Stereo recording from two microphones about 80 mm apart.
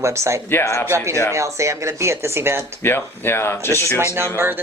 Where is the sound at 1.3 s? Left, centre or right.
Right.